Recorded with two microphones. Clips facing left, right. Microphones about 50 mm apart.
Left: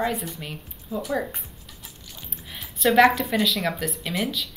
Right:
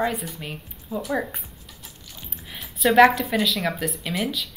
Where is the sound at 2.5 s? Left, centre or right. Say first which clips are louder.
Right 1 dB; centre.